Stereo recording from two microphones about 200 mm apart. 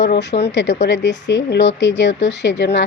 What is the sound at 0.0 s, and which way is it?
Speech, 60° left (ahead or behind).